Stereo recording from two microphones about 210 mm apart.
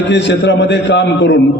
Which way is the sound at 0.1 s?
55° left (ahead or behind).